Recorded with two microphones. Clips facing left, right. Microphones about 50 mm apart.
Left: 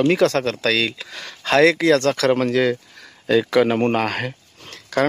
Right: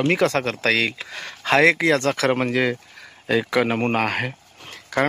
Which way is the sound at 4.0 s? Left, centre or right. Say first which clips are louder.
Even; centre.